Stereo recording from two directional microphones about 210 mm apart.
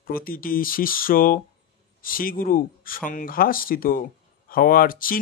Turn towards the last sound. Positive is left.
turn(degrees=40)  # may be behind; listen again after turning